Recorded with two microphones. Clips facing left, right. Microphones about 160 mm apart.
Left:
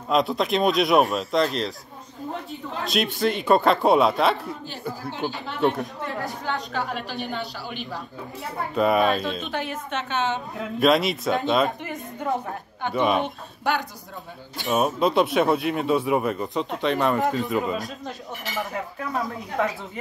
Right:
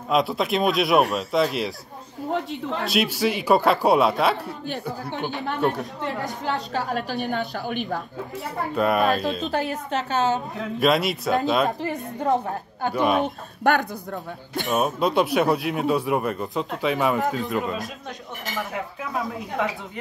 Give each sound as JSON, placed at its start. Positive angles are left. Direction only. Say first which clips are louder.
{"t": 0.1, "sound": "speech", "louder": "even", "side_deg": 0}
{"t": 2.8, "sound": "speech", "louder": "even", "side_deg": 0}
{"t": 5.6, "sound": "speech", "louder": "left 2 dB", "side_deg": 0}
{"t": 6.4, "sound": "a woman's voice", "louder": "right 3 dB", "side_deg": -35}
{"t": 8.7, "sound": "speech", "louder": "left 1 dB", "side_deg": 0}
{"t": 9.5, "sound": "a woman's voice", "louder": "right 4 dB", "side_deg": -35}
{"t": 10.8, "sound": "speech", "louder": "left 1 dB", "side_deg": 0}
{"t": 11.8, "sound": "a woman's voice", "louder": "right 4 dB", "side_deg": -35}
{"t": 12.9, "sound": "speech", "louder": "right 1 dB", "side_deg": 0}
{"t": 13.7, "sound": "speech", "louder": "right 5 dB", "side_deg": -60}
{"t": 14.7, "sound": "speech", "louder": "left 1 dB", "side_deg": 0}
{"t": 19.6, "sound": "speech", "louder": "left 2 dB", "side_deg": 0}